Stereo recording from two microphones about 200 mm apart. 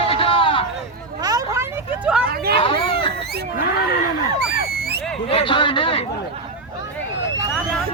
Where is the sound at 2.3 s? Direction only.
50° right (ahead or behind).